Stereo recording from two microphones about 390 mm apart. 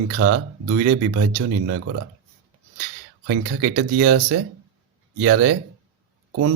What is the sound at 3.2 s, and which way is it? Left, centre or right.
Speech, right.